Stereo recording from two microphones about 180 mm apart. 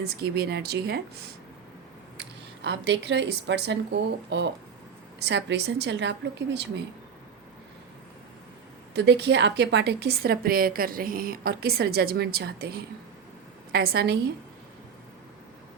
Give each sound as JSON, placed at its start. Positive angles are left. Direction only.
{"t": 0.0, "sound": "a woman's voice", "side_deg": -60}
{"t": 2.1, "sound": "speech", "side_deg": -75}
{"t": 9.0, "sound": "a woman's voice", "side_deg": -70}